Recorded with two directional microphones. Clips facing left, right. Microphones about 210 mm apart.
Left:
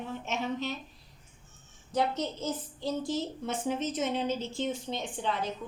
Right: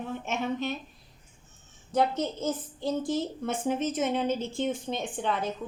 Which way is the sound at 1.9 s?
50° right (ahead or behind).